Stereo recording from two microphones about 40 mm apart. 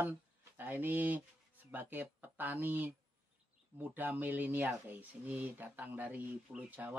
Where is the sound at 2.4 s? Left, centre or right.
Right.